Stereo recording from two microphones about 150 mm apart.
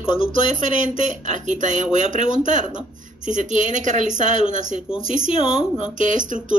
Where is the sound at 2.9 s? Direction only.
60° right (ahead or behind).